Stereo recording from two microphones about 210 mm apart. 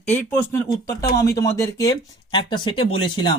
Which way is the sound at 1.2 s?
15° left (ahead or behind).